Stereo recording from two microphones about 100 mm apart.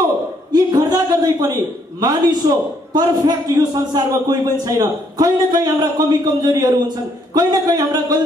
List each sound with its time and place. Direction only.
0.5 s a man's voice: 45° right (ahead or behind)